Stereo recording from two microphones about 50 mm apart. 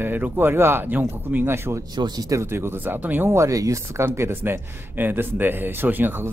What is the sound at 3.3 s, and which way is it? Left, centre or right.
Speech, right.